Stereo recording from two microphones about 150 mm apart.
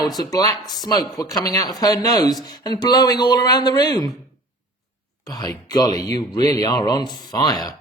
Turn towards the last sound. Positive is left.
turn(degrees=25)  # may be behind; listen again after turning